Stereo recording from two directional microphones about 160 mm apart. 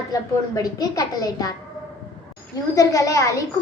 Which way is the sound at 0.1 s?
20° left (ahead or behind).